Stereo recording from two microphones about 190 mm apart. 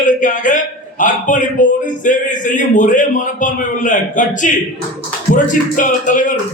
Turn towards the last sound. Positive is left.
turn(degrees=45)  # may be behind; listen again after turning